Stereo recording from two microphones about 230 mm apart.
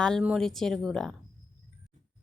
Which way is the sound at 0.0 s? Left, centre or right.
Centre.